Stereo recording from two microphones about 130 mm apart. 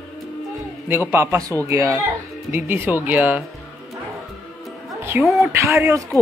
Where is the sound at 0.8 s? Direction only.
15° right (ahead or behind).